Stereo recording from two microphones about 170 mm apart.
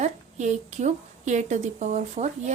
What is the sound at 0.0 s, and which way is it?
A woman's voice, 45° right (ahead or behind).